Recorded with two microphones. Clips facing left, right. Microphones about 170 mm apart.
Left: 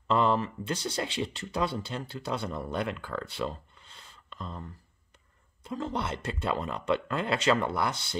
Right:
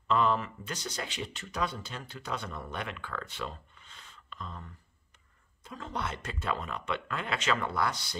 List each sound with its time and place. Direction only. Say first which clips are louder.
0.1 s speech: left 2 dB; 30° left (ahead or behind)